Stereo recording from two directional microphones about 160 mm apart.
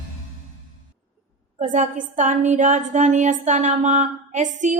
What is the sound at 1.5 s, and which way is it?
A woman's voice, 50° right (ahead or behind).